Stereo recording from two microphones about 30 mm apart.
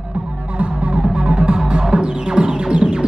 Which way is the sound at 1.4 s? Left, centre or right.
Right.